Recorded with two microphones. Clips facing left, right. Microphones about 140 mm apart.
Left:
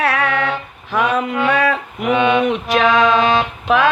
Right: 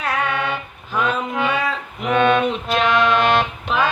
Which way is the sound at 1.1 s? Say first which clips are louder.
Left 5 dB; 70° left (ahead or behind).